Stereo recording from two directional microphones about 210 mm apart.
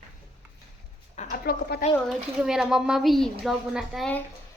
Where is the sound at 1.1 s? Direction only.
40° left (ahead or behind).